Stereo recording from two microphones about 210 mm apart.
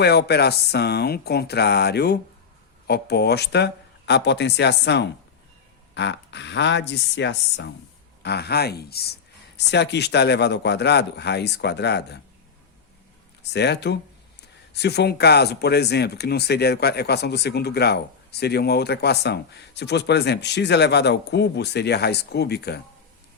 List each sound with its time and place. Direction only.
0.0 s speech: 50° left (ahead or behind)
13.4 s speech: 55° left (ahead or behind)